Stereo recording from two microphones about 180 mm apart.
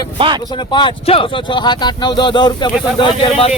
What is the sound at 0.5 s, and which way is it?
Speech, 25° left (ahead or behind).